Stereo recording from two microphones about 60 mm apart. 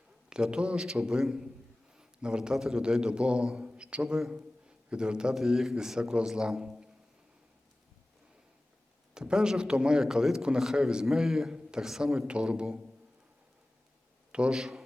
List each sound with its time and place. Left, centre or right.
0.3 s a man's voice: centre
9.1 s a man's voice: centre
14.5 s a man's voice: centre